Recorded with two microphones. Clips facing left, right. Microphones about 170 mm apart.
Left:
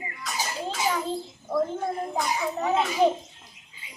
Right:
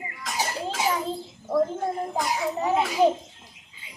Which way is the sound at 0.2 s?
90° right.